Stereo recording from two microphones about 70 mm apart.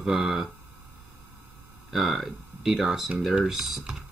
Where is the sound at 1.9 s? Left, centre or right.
Centre.